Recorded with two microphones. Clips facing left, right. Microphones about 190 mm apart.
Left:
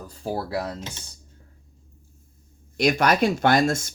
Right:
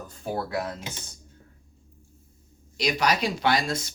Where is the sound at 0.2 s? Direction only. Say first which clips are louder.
Left 2 dB; 30° left (ahead or behind).